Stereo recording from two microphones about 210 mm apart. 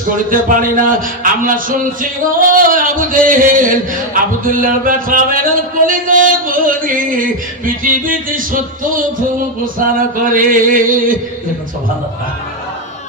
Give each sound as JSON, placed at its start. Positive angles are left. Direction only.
{"t": 0.3, "sound": "a man's voice", "side_deg": -40}
{"t": 10.2, "sound": "a man's voice", "side_deg": -40}